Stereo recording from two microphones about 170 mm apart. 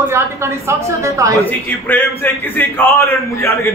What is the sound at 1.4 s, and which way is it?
A man's voice, 10° left (ahead or behind).